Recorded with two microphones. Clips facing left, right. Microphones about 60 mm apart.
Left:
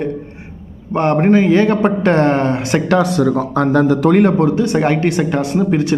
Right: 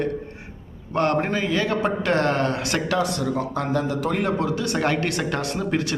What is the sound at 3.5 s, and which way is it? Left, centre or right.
Speech, left.